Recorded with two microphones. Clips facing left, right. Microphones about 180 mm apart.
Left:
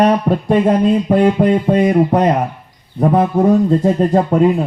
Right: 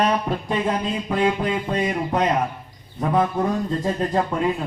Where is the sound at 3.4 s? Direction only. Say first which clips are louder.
Left 11 dB; 45° left (ahead or behind).